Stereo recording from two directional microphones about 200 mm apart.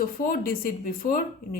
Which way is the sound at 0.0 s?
45° left (ahead or behind).